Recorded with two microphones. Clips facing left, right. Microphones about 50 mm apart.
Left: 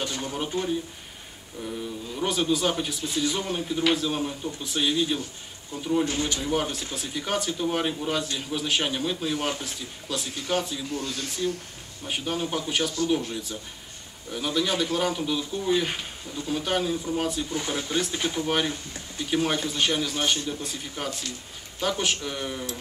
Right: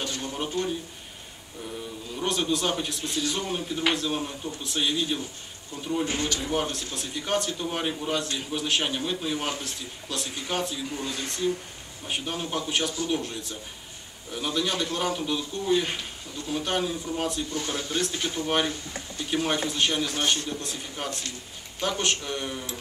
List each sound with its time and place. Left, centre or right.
0.0 s a sound: centre
1.6 s speech: centre
10.9 s speech: centre
12.1 s speech: centre
17.5 s speech: centre